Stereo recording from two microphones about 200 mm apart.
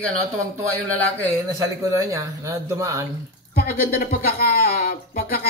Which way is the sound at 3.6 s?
45° left (ahead or behind).